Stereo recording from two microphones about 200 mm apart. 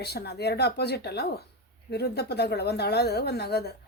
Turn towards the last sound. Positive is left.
turn(degrees=55)  # may be behind; listen again after turning